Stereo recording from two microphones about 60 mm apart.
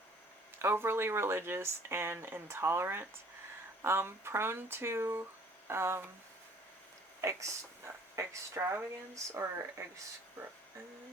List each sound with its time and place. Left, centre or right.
0.6 s speech: right
7.2 s speech: right